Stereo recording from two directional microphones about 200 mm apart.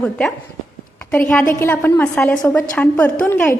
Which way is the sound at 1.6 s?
10° left (ahead or behind).